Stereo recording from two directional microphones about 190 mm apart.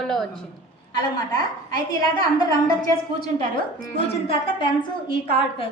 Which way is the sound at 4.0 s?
30° left (ahead or behind).